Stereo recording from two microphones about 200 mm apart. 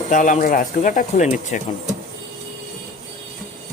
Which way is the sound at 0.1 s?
40° left (ahead or behind).